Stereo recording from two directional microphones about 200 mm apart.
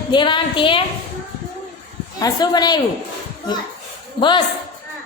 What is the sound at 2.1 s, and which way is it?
Speech, 20° left (ahead or behind).